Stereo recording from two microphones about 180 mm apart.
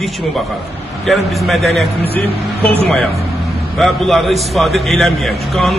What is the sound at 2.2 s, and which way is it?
Speech, 35° right (ahead or behind).